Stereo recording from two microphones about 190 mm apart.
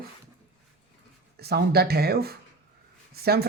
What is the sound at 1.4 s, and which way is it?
Speech, 55° right (ahead or behind).